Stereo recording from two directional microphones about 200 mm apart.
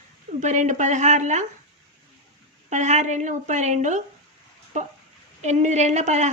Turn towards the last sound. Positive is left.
turn(degrees=-35)  # may be behind; listen again after turning